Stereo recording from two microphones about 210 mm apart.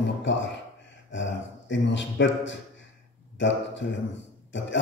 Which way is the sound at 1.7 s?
60° left (ahead or behind).